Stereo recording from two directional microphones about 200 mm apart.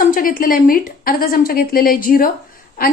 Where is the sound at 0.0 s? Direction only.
45° left (ahead or behind).